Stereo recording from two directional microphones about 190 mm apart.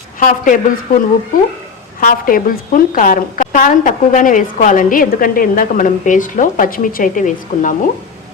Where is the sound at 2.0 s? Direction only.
50° left (ahead or behind).